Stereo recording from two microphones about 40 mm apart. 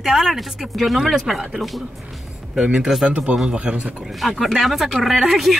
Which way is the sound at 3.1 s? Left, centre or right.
Right.